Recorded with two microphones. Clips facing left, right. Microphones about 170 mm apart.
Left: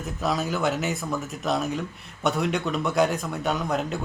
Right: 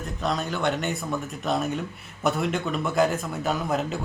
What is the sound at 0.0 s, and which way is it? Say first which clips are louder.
Speech: left 1 dB; 5° left (ahead or behind).